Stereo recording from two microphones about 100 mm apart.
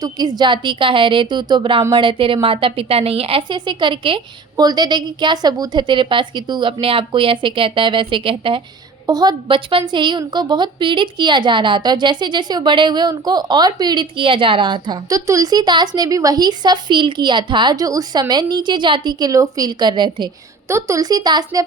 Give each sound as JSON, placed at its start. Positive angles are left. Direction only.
{"t": 0.0, "sound": "a woman's voice", "side_deg": -40}
{"t": 3.5, "sound": "a woman's voice", "side_deg": -50}
{"t": 4.5, "sound": "a woman's voice", "side_deg": -45}
{"t": 9.0, "sound": "a woman's voice", "side_deg": -40}
{"t": 9.5, "sound": "a woman's voice", "side_deg": -60}
{"t": 20.7, "sound": "a woman's voice", "side_deg": -25}